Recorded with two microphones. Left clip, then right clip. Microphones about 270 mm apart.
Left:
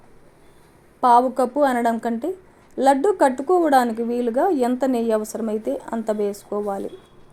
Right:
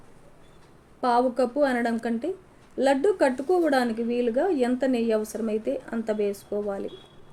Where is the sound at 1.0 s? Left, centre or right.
Left.